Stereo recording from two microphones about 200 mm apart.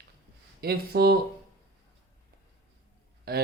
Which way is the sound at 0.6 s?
50° right (ahead or behind).